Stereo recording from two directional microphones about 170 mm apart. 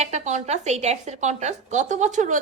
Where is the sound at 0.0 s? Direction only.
40° right (ahead or behind).